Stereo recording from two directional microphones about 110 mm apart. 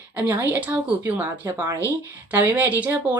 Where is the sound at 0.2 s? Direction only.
15° right (ahead or behind).